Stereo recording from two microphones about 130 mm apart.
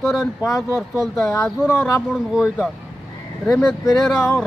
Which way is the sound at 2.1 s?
5° right (ahead or behind).